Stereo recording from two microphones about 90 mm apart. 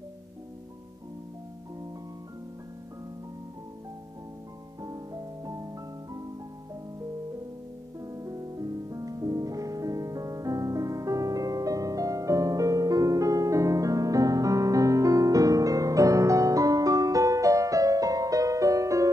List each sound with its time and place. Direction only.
4.8 s music: 40° right (ahead or behind)
8.0 s music: 40° right (ahead or behind)